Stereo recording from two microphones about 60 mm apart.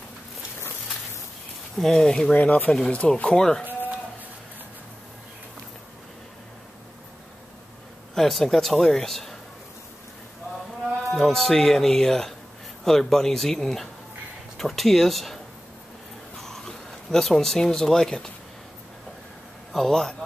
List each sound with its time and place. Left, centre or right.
1.8 s speech: centre
2.3 s speech: left
8.1 s speech: centre
11.1 s speech: centre
16.3 s a sound: centre
19.7 s speech: centre